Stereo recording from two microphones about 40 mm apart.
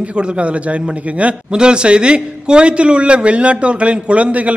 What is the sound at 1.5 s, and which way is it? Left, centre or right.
A man's voice, right.